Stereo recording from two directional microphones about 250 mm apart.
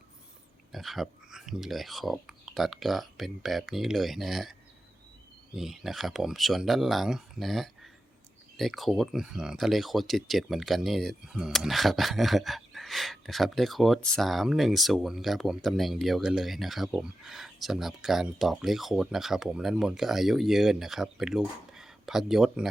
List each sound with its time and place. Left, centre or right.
0.7 s speech: centre
5.5 s speech: centre